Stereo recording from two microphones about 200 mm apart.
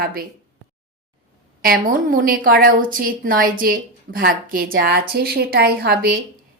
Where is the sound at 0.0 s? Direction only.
45° right (ahead or behind).